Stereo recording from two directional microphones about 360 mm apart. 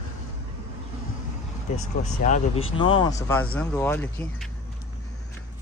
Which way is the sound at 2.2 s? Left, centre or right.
Left.